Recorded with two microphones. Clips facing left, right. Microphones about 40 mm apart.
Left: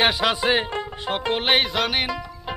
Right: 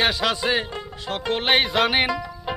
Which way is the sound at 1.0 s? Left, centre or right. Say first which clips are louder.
Left 1 dB; left.